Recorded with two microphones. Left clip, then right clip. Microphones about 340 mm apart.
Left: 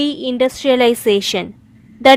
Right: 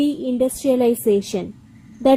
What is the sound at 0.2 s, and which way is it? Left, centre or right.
A woman's voice, left.